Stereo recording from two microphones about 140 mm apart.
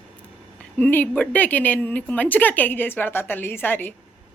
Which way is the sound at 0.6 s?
10° left (ahead or behind).